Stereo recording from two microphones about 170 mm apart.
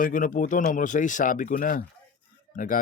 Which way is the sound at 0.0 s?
50° left (ahead or behind).